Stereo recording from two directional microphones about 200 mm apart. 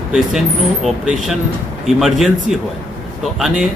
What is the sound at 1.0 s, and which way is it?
A man's voice, 5° right (ahead or behind).